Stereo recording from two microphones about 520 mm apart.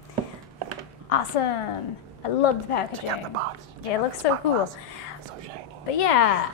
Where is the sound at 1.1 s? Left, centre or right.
Left.